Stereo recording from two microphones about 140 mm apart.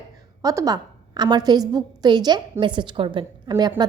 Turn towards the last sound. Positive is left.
turn(degrees=-30)  # may be behind; listen again after turning